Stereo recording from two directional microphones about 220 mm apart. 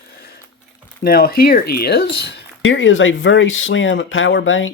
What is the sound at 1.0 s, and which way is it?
Speech, 45° left (ahead or behind).